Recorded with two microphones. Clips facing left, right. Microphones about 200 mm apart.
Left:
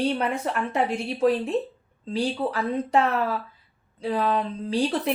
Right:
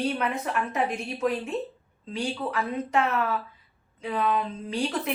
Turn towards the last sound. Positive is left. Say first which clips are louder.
# left 4 dB
turn(degrees=35)  # may be behind; listen again after turning